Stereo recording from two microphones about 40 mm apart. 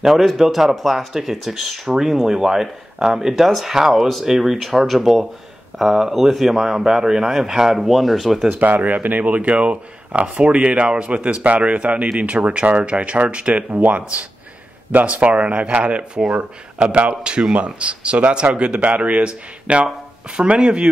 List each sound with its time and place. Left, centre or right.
0.0 s speech: centre
8.5 s speech: right
13.5 s speech: right